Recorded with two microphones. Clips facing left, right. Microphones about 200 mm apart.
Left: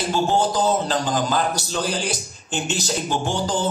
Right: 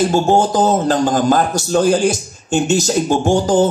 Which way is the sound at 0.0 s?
45° right (ahead or behind).